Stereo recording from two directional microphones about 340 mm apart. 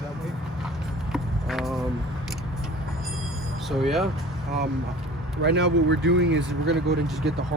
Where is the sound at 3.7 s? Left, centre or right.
Centre.